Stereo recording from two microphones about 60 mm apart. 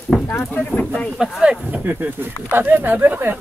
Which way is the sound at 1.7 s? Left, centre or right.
Right.